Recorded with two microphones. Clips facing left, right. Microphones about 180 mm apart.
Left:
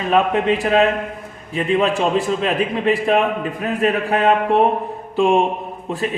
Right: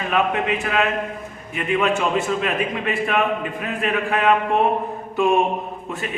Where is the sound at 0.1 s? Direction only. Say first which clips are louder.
Left 5 dB; 35° left (ahead or behind).